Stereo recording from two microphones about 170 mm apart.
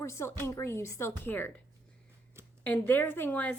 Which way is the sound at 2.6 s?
10° left (ahead or behind).